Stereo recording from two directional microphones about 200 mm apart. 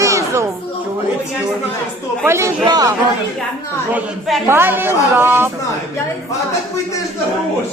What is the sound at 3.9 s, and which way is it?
Speech, centre (ahead or behind).